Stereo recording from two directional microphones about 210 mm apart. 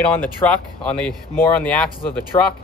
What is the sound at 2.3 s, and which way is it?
Speech, 20° left (ahead or behind).